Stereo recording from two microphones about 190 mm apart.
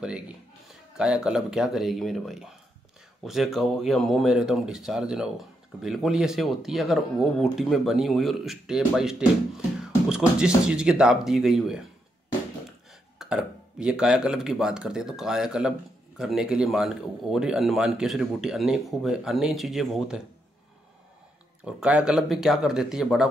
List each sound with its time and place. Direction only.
0.7 s speech: 5° right (ahead or behind)
9.6 s music: 5° right (ahead or behind)
10.6 s speech: 5° right (ahead or behind)
13.2 s speech: 5° right (ahead or behind)
21.6 s speech: 5° right (ahead or behind)